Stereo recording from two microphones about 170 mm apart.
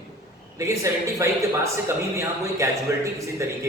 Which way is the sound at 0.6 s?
20° right (ahead or behind).